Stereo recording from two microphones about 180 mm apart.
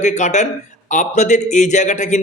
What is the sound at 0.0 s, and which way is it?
Speech, 40° left (ahead or behind).